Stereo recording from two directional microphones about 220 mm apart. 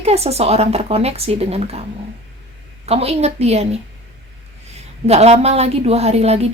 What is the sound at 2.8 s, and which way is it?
Speech, 30° right (ahead or behind).